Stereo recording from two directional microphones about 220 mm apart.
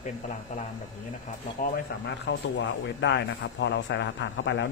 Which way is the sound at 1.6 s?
50° left (ahead or behind).